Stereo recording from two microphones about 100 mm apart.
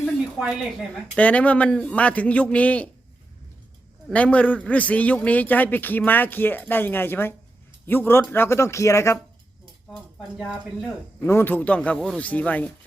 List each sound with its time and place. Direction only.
0.0 s a sound: 5° right (ahead or behind)
1.1 s a man's voice: 15° left (ahead or behind)
4.1 s a man's voice: 15° left (ahead or behind); by 9.1 s 30° left (ahead or behind)
9.9 s speech: centre (ahead or behind)
11.2 s a man's voice: 20° left (ahead or behind)